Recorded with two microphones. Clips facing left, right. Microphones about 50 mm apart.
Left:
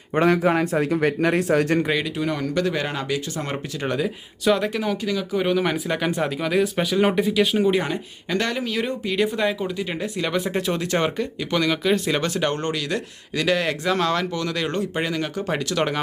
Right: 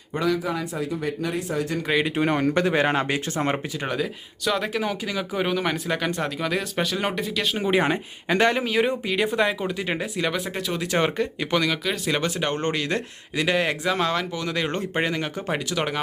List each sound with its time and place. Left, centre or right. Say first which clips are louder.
0.1 s a man's voice: left 6 dB; left
2.0 s speech: right 3 dB; right
3.8 s speech: left 2 dB; centre
5.5 s speech: left 5 dB; centre
7.8 s speech: right 3 dB; right
10.2 s speech: left 2 dB; centre
10.8 s speech: even; centre
11.7 s speech: left 4 dB; centre
12.2 s speech: left 2 dB; centre
12.5 s speech: even; right
13.3 s speech: left 1 dB; centre